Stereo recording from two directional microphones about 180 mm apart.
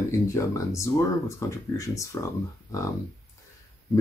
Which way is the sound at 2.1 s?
15° left (ahead or behind).